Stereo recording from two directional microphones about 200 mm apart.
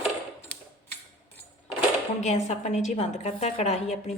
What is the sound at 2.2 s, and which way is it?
A woman's voice, 35° left (ahead or behind).